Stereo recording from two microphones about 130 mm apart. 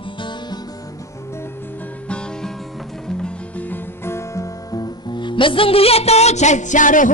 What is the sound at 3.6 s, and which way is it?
Speech, 20° left (ahead or behind).